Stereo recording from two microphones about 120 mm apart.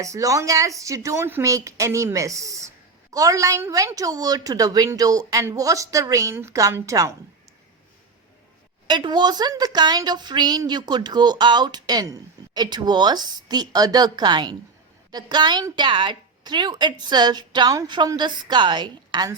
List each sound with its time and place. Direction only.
0.0 s speech: 25° right (ahead or behind)
8.9 s a woman's voice: 40° right (ahead or behind)